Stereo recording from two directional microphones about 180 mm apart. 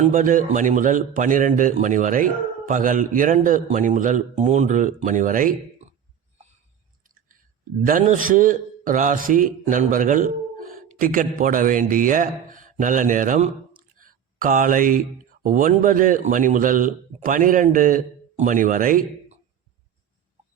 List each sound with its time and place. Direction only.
0.0 s a man's voice: 45° right (ahead or behind)
7.9 s a man's voice: 45° right (ahead or behind)
14.0 s a sound: 50° right (ahead or behind)
15.4 s a man's voice: 45° right (ahead or behind)